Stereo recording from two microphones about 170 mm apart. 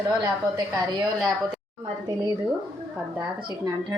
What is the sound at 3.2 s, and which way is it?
Speech, 20° right (ahead or behind).